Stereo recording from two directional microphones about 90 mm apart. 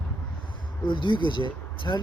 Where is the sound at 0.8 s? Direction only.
65° left (ahead or behind).